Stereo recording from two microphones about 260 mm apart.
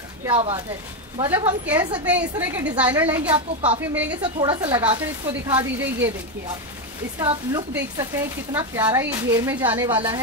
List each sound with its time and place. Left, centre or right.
0.2 s a woman's voice: centre
2.0 s a woman's voice: centre
4.2 s a woman's voice: centre
7.2 s a woman's voice: centre